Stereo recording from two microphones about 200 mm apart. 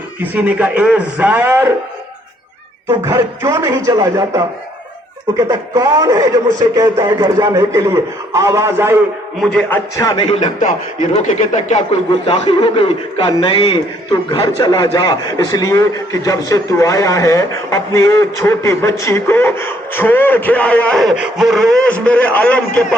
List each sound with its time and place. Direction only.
0.3 s a man's voice: 5° right (ahead or behind)
3.0 s a man's voice: 15° right (ahead or behind)
5.5 s a man's voice: 15° right (ahead or behind)
9.4 s a man's voice: 5° left (ahead or behind)
10.1 s speech: 25° left (ahead or behind)
10.6 s speech: 35° left (ahead or behind)
12.2 s a man's voice: 25° left (ahead or behind); by 22.6 s 5° left (ahead or behind)